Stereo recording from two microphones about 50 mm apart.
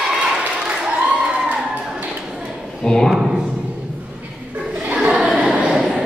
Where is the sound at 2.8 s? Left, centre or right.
Centre.